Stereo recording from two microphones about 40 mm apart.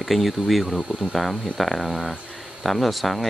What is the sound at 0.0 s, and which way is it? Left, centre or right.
Speech, centre.